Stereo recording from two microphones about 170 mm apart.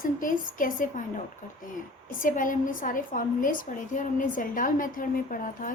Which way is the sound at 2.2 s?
50° left (ahead or behind).